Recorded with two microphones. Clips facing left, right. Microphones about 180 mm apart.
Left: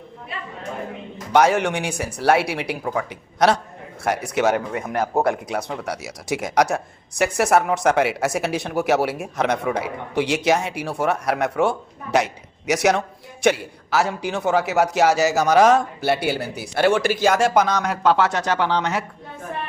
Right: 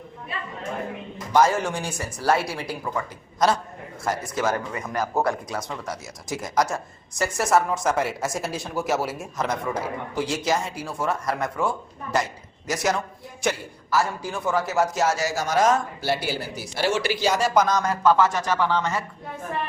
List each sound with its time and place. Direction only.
1.3 s speech: 70° left (ahead or behind)